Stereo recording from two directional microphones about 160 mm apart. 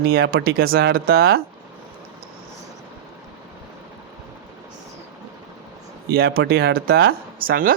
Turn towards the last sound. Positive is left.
turn(degrees=-65)  # may be behind; listen again after turning